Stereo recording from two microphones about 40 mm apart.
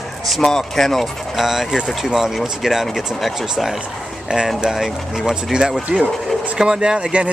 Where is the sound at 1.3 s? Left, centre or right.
Centre.